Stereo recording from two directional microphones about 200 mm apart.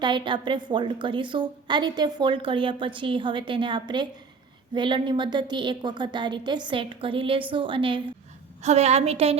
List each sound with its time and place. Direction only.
0.0 s a woman's voice: 25° right (ahead or behind)